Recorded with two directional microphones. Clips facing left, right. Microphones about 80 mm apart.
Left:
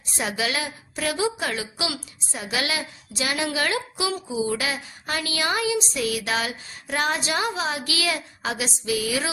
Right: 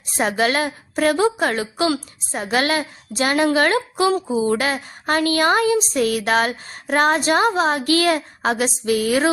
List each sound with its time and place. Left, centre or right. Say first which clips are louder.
0.2 s a woman's voice: right 8 dB; right